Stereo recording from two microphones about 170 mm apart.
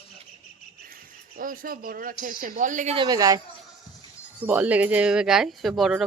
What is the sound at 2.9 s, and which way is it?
Speech, 25° right (ahead or behind).